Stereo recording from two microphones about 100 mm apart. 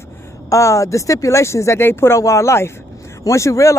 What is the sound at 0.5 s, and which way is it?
Speech, 30° left (ahead or behind).